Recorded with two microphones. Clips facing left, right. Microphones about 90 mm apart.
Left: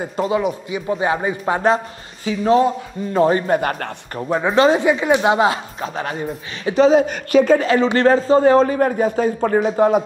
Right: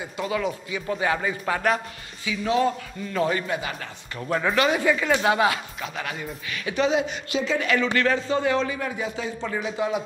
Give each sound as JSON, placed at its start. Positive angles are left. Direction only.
{"t": 0.3, "sound": "speech", "side_deg": 20}
{"t": 2.2, "sound": "speech", "side_deg": 40}
{"t": 4.2, "sound": "speech", "side_deg": 20}
{"t": 7.6, "sound": "a man's voice", "side_deg": 30}